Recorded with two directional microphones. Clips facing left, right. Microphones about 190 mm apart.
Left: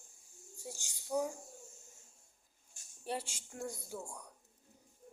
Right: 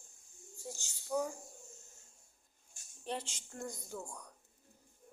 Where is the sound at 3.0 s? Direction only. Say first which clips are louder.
Left 1 dB; 10° left (ahead or behind).